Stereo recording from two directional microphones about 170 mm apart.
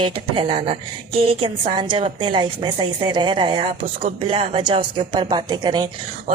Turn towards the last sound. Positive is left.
turn(degrees=-25)  # may be behind; listen again after turning